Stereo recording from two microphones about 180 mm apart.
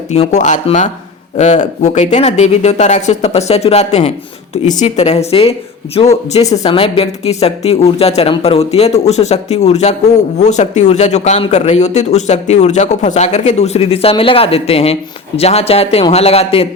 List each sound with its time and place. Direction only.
0.1 s speech: 40° left (ahead or behind)